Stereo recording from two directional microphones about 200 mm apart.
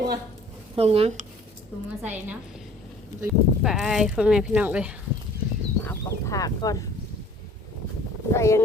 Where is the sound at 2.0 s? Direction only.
10° right (ahead or behind).